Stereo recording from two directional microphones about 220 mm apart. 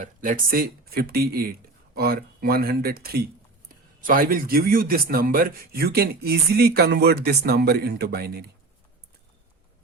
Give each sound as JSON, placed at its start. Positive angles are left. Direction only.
{"t": 0.0, "sound": "a man's voice", "side_deg": -40}